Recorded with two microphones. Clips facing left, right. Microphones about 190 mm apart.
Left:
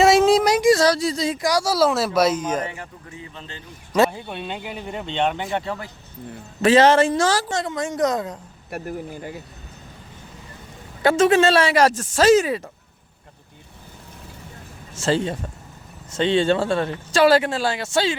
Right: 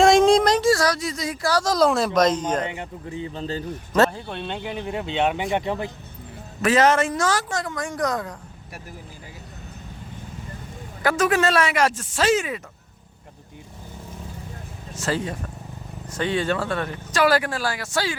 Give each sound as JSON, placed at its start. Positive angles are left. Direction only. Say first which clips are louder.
{"t": 0.0, "sound": "a sound", "louder": "even", "side_deg": 5}
{"t": 1.4, "sound": "speech", "louder": "right 1 dB", "side_deg": 15}
{"t": 3.1, "sound": "speech", "louder": "right 9 dB", "side_deg": -30}
{"t": 3.9, "sound": "speech", "louder": "left 1 dB", "side_deg": 10}
{"t": 6.6, "sound": "speech", "louder": "left 4 dB", "side_deg": 30}
{"t": 8.7, "sound": "speech", "louder": "left 12 dB", "side_deg": 60}
{"t": 11.0, "sound": "speech", "louder": "left 5 dB", "side_deg": 25}
{"t": 14.9, "sound": "speech", "louder": "left 4 dB", "side_deg": 25}